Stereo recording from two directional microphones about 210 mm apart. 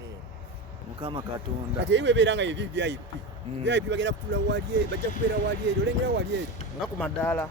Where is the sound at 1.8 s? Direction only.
60° right (ahead or behind).